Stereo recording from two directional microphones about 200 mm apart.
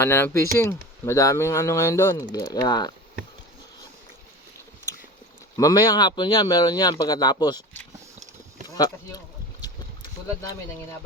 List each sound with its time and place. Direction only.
0.0 s speech: 10° left (ahead or behind)
5.5 s speech: 20° left (ahead or behind)
8.6 s a sound: 20° left (ahead or behind)